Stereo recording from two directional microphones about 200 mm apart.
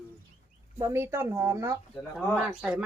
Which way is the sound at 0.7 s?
15° right (ahead or behind).